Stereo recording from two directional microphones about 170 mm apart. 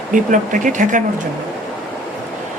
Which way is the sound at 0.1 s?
50° right (ahead or behind).